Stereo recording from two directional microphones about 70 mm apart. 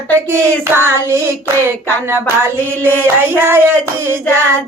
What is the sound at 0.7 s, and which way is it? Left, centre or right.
Music, right.